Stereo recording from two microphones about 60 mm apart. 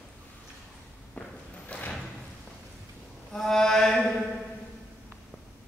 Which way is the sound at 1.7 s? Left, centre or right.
Left.